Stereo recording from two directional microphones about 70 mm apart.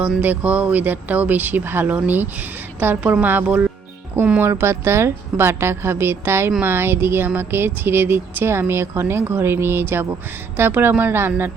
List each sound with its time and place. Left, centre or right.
0.2 s speech: right
4.4 s speech: right